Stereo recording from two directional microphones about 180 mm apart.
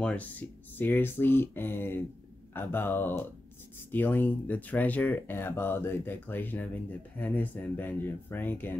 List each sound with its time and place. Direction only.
0.0 s speech: 10° left (ahead or behind)